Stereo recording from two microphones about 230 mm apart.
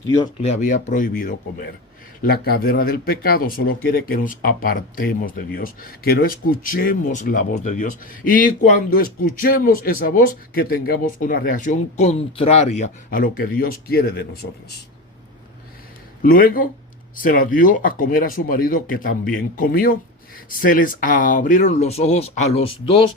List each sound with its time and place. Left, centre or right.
0.2 s speech: left
16.2 s speech: left